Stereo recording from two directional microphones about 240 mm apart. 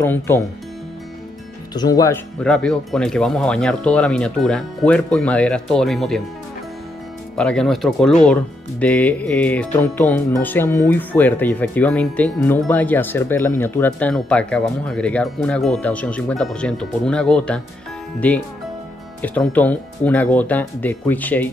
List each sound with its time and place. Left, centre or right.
0.0 s speech: centre
1.7 s speech: centre
2.4 s speech: centre
7.3 s speech: centre
19.2 s speech: centre